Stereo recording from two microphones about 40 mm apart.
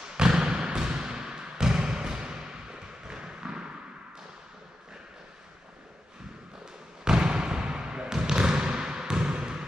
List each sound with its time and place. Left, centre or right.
0.1 s basketball bounce: centre
7.1 s basketball bounce: centre